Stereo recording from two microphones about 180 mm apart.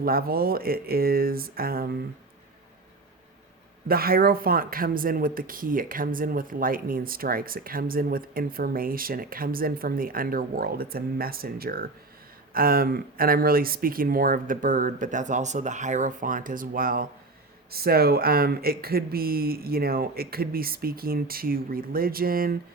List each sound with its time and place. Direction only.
0.0 s speech: 55° right (ahead or behind)
3.8 s speech: 55° right (ahead or behind)